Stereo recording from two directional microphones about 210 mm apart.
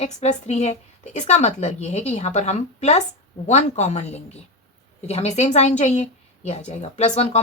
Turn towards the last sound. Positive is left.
turn(degrees=30)  # may be behind; listen again after turning